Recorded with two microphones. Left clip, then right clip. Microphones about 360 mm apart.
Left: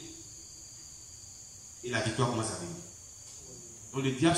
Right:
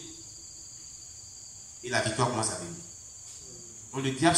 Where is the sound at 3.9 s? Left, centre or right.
Centre.